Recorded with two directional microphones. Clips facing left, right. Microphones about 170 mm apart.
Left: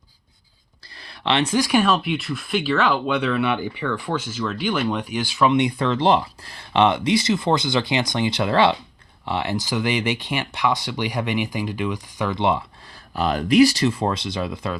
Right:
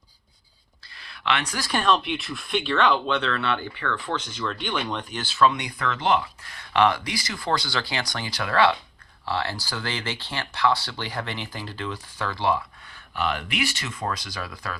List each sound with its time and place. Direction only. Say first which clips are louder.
0.9 s a sound: left 5 dB; 35° left (ahead or behind)
1.6 s speech: left 4 dB; 10° left (ahead or behind)
13.1 s speech: left 12 dB; 35° left (ahead or behind)